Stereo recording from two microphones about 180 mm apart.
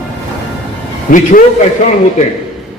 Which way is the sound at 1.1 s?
50° left (ahead or behind).